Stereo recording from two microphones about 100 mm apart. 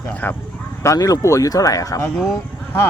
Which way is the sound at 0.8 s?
35° left (ahead or behind).